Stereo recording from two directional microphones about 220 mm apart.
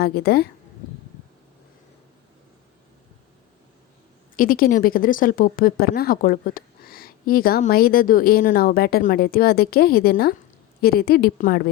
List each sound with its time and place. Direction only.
0.0 s a woman's voice: 45° left (ahead or behind)
4.4 s a woman's voice: 40° left (ahead or behind)